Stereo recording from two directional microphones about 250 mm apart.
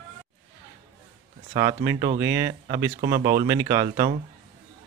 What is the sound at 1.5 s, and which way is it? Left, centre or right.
Speech, centre.